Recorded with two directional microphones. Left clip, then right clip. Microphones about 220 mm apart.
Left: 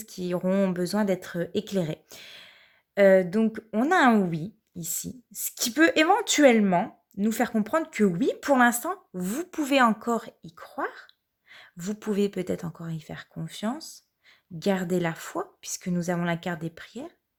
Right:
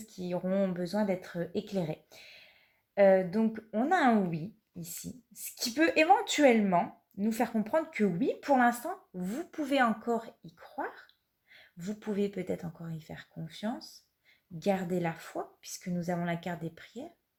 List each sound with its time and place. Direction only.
0.0 s speech: 45° left (ahead or behind)
5.4 s speech: 45° left (ahead or behind)